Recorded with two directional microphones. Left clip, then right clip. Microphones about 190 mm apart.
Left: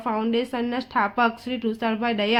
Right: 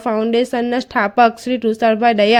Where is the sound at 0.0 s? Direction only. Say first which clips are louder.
Right 8 dB; 45° right (ahead or behind).